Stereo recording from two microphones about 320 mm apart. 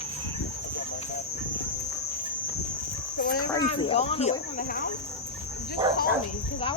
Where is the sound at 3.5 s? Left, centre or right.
Centre.